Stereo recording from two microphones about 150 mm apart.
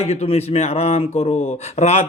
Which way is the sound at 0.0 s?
45° left (ahead or behind).